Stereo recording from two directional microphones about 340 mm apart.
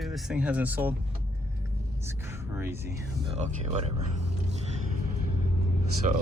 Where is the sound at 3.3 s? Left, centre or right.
Centre.